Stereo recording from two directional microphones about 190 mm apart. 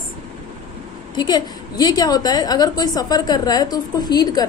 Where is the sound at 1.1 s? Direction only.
20° left (ahead or behind).